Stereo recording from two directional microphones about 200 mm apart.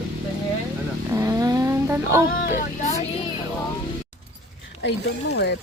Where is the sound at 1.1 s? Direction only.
15° right (ahead or behind).